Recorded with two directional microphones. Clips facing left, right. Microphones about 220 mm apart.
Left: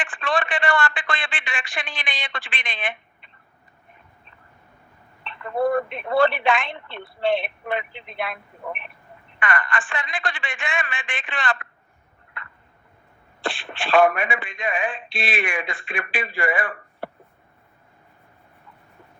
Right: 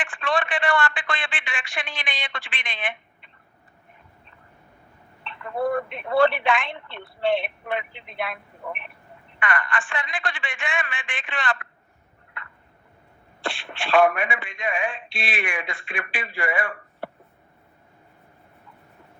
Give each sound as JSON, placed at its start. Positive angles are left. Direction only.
{"t": 0.1, "sound": "speech", "side_deg": 35}
{"t": 5.5, "sound": "speech", "side_deg": 40}
{"t": 13.4, "sound": "speech", "side_deg": 35}